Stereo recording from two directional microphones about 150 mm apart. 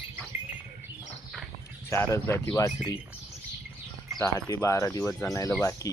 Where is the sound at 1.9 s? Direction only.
15° left (ahead or behind).